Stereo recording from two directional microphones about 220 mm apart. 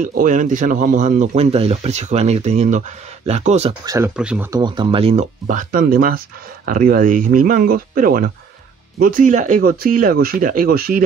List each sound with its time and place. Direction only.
0.0 s speech: 35° right (ahead or behind)
3.8 s speech: 15° right (ahead or behind)
4.2 s speech: 5° right (ahead or behind)
4.5 s speech: 20° right (ahead or behind); by 11.1 s 40° right (ahead or behind)